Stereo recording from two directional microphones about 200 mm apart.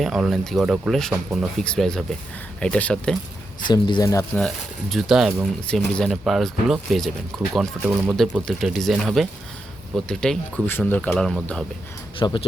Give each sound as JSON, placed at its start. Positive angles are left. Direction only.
{"t": 0.0, "sound": "speech", "side_deg": 0}
{"t": 3.6, "sound": "speech", "side_deg": 25}
{"t": 4.4, "sound": "speech", "side_deg": 0}
{"t": 12.2, "sound": "speech", "side_deg": 25}